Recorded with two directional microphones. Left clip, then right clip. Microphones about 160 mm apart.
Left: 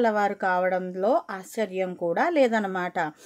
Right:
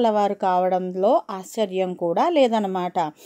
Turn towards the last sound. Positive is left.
turn(degrees=-20)  # may be behind; listen again after turning